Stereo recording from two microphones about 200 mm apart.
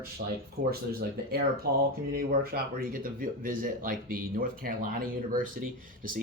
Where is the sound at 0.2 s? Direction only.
45° right (ahead or behind).